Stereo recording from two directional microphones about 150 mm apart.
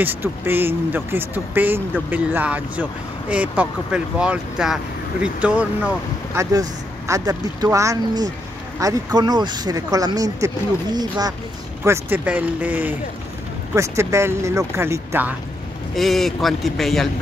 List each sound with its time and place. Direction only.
0.0 s speech: 15° right (ahead or behind)
6.3 s speech: 25° right (ahead or behind)
11.8 s speech: 15° right (ahead or behind)
16.0 s a man's voice: centre (ahead or behind)